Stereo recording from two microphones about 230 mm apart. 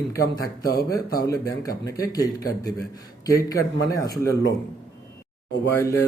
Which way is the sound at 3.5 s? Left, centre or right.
Centre.